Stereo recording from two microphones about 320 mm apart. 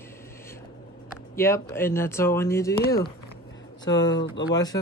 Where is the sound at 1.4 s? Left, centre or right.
Centre.